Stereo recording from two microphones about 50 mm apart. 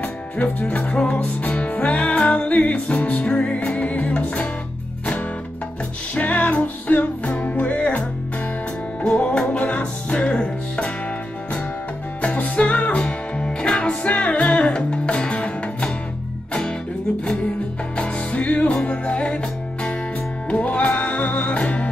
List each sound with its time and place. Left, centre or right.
0.0 s music: left
0.7 s music: left
2.0 s music: centre
2.2 s music: left
6.1 s music: left
9.0 s music: centre
12.2 s music: left
17.9 s music: centre